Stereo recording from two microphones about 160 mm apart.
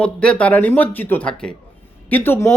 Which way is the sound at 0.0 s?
5° left (ahead or behind).